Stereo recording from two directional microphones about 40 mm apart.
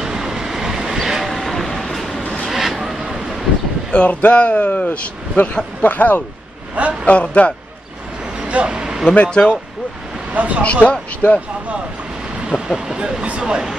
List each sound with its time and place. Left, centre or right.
0.0 s vehicle: centre
1.0 s boat: centre
1.3 s a sound: centre
2.4 s vehicle: centre
3.9 s speech: left
6.7 s vehicle: right
7.1 s speech: left
8.4 s vehicle: right
9.1 s speech: left
10.3 s speech: right
10.6 s speech: left
12.4 s speech: centre
13.0 s speech: right